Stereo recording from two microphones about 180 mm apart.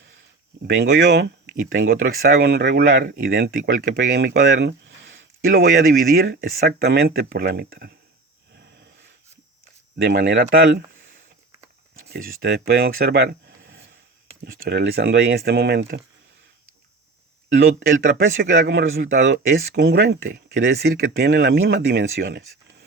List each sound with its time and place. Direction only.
1.0 s speech: 65° right (ahead or behind)
10.0 s speech: 60° right (ahead or behind)
12.0 s speech: 60° right (ahead or behind)
14.4 s speech: 60° right (ahead or behind)
17.5 s speech: 60° right (ahead or behind)
18.6 s speech: 75° right (ahead or behind)